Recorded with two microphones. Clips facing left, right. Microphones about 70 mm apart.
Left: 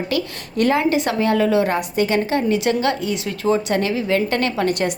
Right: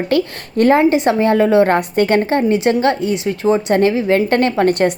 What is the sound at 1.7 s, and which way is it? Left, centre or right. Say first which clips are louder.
A woman's voice: right 5 dB; right.